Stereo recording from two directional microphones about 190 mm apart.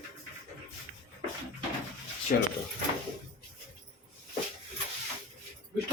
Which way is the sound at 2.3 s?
50° left (ahead or behind).